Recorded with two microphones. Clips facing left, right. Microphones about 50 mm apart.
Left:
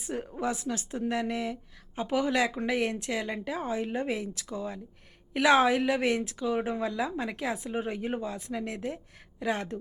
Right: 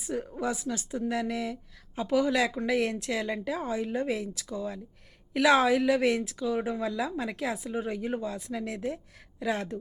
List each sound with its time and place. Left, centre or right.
0.0 s speech: left